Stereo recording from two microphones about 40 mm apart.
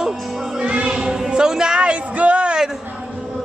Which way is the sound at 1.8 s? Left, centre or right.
Right.